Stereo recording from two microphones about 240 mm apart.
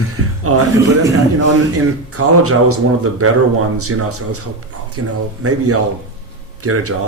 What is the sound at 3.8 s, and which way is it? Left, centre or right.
Speech, right.